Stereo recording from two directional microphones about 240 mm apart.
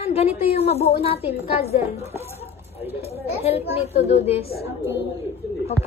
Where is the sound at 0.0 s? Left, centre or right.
Left.